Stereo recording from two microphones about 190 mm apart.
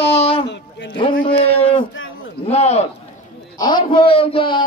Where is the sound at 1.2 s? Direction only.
30° left (ahead or behind).